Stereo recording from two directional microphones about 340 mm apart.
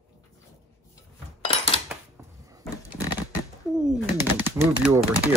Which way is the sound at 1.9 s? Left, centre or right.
Centre.